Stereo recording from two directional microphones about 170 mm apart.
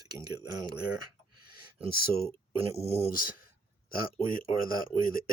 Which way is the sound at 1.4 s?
60° left (ahead or behind).